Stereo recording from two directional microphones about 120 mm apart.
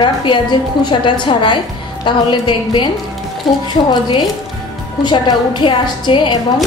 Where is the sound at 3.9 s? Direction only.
40° left (ahead or behind).